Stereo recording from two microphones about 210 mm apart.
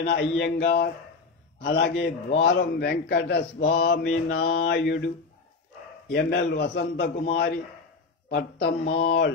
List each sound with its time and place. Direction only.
0.0 s a man's voice: 50° left (ahead or behind)
6.1 s a man's voice: 50° left (ahead or behind)